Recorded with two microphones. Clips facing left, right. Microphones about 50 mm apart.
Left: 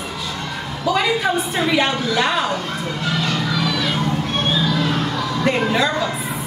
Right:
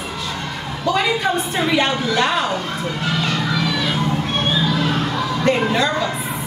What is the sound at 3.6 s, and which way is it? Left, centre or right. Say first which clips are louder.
Children playing: even; centre.